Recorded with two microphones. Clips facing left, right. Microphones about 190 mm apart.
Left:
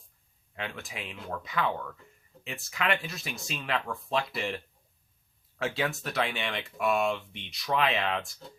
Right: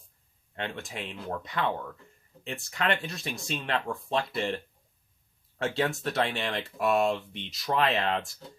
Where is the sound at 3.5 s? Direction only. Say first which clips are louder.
Right 1 dB; 35° right (ahead or behind).